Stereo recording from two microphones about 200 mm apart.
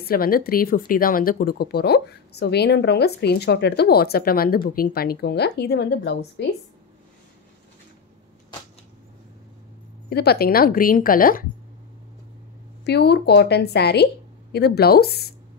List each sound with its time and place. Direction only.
0.0 s speech: 50° left (ahead or behind)
10.0 s speech: 55° left (ahead or behind)
12.8 s speech: 55° left (ahead or behind)